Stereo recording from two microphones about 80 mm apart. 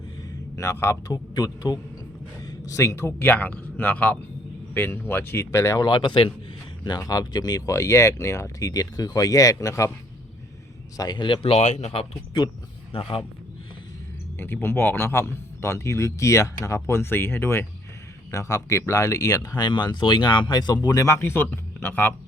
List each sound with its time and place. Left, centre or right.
0.5 s speech: left
1.1 s speech: left
2.5 s a man's voice: left
5.8 s speech: left
6.8 s speech: left
7.7 s speech: left
10.9 s speech: left
11.9 s speech: left
14.3 s speech: left
18.3 s speech: left
21.2 s speech: left